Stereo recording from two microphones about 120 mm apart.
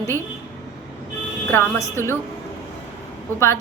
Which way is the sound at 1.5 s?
20° left (ahead or behind).